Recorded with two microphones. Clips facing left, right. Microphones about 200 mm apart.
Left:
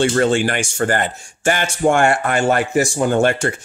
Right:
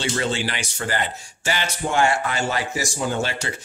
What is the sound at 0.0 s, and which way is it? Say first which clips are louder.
A man's voice: left 9 dB; 50° left (ahead or behind).